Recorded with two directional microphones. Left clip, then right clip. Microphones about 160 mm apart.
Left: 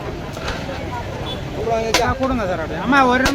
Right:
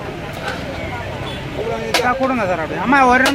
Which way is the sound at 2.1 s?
30° right (ahead or behind).